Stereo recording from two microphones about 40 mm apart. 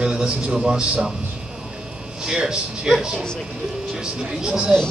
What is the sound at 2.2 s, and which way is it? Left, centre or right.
Speech, centre.